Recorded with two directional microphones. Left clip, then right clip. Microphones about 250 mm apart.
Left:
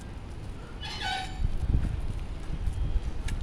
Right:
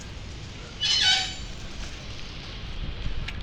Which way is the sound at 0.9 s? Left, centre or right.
Left.